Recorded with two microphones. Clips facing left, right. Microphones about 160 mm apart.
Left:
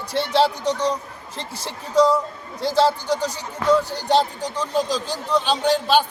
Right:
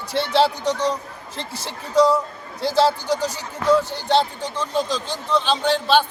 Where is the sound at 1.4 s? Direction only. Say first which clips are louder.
Even; 10° left (ahead or behind).